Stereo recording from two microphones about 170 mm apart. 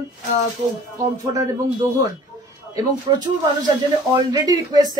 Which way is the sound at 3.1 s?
25° right (ahead or behind).